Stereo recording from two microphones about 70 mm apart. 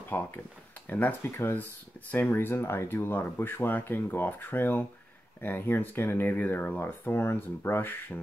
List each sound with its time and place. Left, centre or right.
0.1 s speech: left